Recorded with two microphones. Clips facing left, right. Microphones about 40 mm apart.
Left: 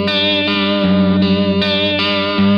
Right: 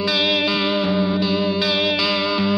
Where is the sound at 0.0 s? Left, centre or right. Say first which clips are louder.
Left 4 dB; left.